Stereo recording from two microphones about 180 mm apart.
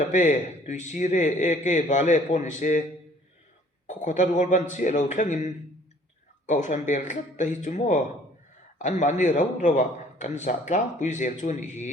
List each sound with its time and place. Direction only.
0.0 s a man's voice: 40° left (ahead or behind)
3.8 s a man's voice: 40° left (ahead or behind)